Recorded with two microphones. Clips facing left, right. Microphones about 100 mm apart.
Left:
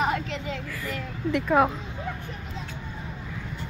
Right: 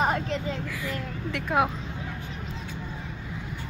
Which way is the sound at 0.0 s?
35° right (ahead or behind).